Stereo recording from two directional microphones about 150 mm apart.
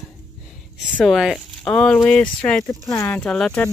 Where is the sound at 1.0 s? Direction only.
Centre (ahead or behind).